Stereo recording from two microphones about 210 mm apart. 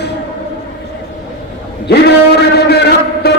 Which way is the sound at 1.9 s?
50° left (ahead or behind).